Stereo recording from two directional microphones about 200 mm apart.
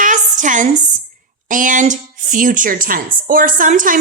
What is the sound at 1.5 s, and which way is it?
A woman's voice, 40° right (ahead or behind).